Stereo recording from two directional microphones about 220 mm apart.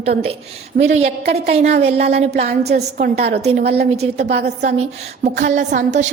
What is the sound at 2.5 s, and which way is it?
Speech, 45° right (ahead or behind).